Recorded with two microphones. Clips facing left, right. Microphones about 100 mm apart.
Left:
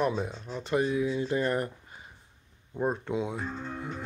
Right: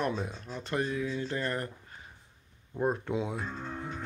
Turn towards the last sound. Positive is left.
turn(degrees=0)  # may be behind; listen again after turning